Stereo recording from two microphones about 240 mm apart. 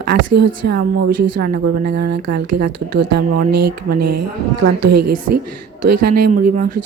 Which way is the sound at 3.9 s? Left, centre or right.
Right.